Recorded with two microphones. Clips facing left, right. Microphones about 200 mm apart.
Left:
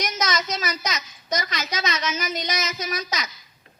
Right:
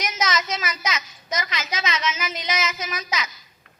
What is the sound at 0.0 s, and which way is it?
A woman's voice, 40° left (ahead or behind).